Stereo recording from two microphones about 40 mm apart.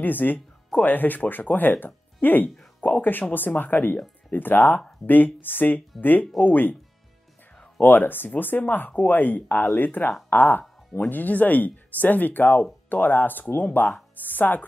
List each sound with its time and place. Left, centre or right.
0.0 s speech: left
7.8 s speech: left